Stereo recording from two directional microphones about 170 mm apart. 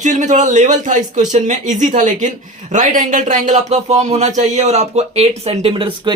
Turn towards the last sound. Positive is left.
turn(degrees=-30)  # may be behind; listen again after turning